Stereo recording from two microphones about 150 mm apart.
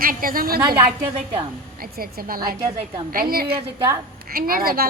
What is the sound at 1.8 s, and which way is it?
A woman's voice, 75° right (ahead or behind).